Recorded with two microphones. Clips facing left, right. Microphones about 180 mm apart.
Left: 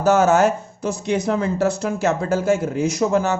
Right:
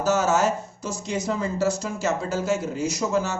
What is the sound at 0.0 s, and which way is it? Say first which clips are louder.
Speech: left 6 dB; 60° left (ahead or behind).